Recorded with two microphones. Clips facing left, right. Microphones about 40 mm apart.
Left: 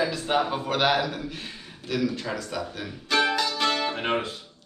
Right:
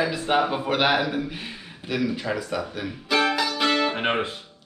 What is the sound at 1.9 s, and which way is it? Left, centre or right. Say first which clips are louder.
Speech: right 2 dB; centre.